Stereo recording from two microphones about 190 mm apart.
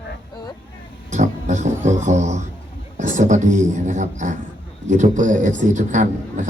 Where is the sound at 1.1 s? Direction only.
40° right (ahead or behind).